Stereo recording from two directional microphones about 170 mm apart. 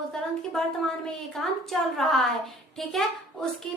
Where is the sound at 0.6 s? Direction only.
5° left (ahead or behind).